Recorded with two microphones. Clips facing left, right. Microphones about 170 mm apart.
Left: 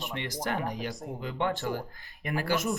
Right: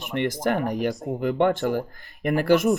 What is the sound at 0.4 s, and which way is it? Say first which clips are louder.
Speech: right 7 dB; 55° right (ahead or behind).